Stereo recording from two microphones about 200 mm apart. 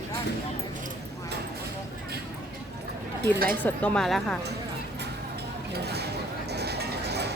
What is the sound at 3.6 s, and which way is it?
Speech, 5° left (ahead or behind).